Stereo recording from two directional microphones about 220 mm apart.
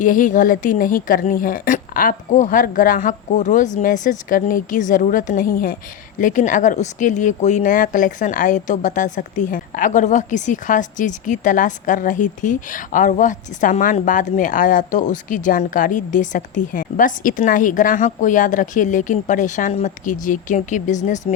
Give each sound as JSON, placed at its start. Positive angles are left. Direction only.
{"t": 0.0, "sound": "speech", "side_deg": 35}